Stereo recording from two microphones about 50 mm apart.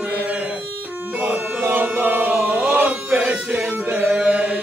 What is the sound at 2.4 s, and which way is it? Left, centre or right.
Music, right.